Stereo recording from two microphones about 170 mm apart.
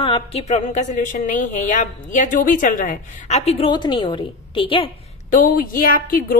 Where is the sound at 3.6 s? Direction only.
25° left (ahead or behind).